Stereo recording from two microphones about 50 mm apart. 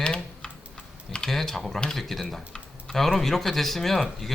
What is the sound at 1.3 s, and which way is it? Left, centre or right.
Speech, centre.